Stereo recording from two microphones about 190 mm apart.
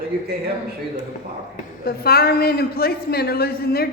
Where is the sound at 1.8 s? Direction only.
55° left (ahead or behind).